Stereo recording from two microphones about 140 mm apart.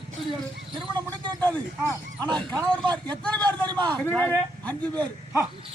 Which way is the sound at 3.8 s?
10° left (ahead or behind).